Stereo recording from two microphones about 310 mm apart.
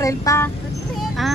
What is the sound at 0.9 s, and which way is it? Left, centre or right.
Speech, centre.